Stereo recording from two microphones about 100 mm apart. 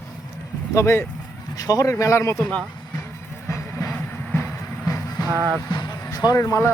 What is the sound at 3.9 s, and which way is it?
Train, 20° left (ahead or behind).